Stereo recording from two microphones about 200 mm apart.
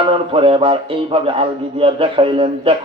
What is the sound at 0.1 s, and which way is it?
A man's voice, 25° right (ahead or behind).